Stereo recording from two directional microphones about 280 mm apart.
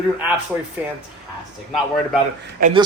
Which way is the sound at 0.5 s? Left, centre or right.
Centre.